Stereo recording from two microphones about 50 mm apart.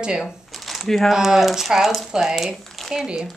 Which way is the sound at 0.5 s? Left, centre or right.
Centre.